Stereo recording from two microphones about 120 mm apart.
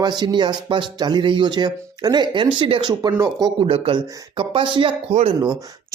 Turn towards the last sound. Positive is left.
turn(degrees=-40)  # may be behind; listen again after turning